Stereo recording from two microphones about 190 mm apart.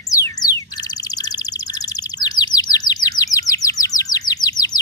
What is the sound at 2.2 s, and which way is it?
Bird, 20° left (ahead or behind).